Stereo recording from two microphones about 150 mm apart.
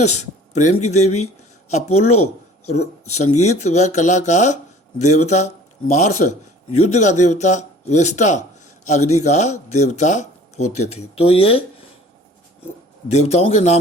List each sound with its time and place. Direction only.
0.0 s speech: 50° left (ahead or behind)
13.1 s speech: 45° left (ahead or behind)